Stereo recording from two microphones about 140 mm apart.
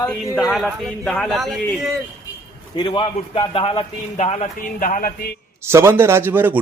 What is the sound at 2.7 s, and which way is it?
A man's voice, 35° left (ahead or behind).